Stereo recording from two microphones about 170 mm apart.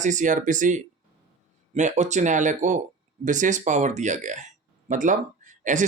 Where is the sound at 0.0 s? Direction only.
45° right (ahead or behind).